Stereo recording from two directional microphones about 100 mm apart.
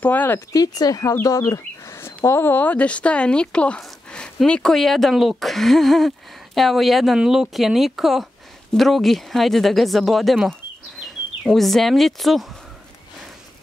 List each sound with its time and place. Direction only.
0.0 s speech: 15° left (ahead or behind)
0.5 s speech: 40° left (ahead or behind); by 12.4 s centre (ahead or behind)